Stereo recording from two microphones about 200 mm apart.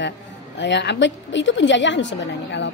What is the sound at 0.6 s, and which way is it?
A woman's voice, 60° left (ahead or behind).